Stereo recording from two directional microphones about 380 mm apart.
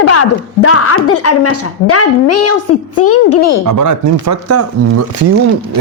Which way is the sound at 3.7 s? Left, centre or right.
Right.